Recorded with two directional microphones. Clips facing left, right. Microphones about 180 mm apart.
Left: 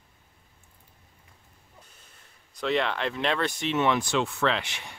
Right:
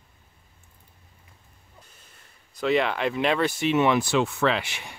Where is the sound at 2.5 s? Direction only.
5° right (ahead or behind).